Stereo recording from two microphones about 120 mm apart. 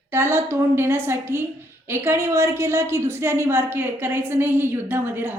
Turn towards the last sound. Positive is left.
turn(degrees=-15)  # may be behind; listen again after turning